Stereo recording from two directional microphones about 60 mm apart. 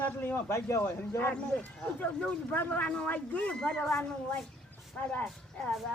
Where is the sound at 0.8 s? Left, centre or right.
Left.